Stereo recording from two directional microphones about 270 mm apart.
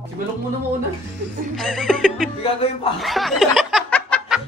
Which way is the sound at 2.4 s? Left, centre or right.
Left.